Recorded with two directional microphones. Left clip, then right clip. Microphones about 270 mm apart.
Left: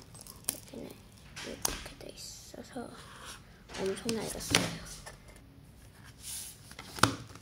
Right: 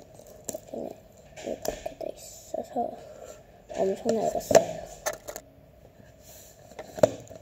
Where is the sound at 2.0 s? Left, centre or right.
Centre.